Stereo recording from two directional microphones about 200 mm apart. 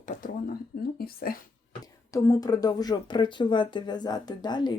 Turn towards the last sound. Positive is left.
turn(degrees=20)  # may be behind; listen again after turning